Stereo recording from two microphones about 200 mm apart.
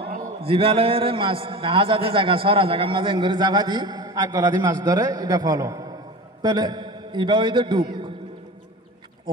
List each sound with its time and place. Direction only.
0.4 s a man's voice: 25° right (ahead or behind)